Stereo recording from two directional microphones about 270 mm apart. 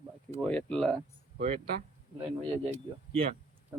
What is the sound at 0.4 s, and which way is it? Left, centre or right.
Speech, centre.